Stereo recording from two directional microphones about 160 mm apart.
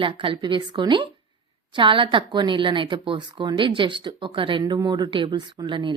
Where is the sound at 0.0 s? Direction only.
30° right (ahead or behind).